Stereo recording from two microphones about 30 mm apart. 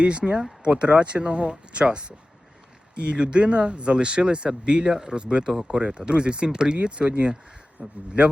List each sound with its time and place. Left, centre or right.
0.0 s speech: right